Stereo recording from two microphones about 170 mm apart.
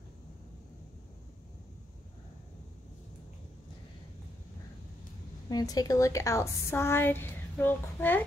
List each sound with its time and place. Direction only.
5.5 s a woman's voice: 20° left (ahead or behind)